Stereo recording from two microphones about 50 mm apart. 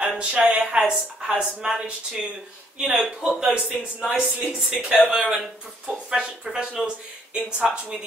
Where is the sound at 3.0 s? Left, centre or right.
Centre.